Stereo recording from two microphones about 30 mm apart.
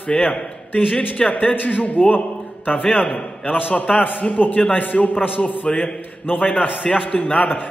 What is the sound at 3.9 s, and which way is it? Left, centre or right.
A man's voice, left.